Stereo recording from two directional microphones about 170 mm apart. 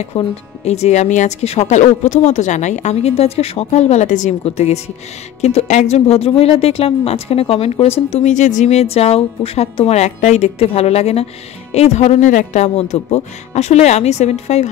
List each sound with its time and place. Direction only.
0.1 s speech: 35° left (ahead or behind)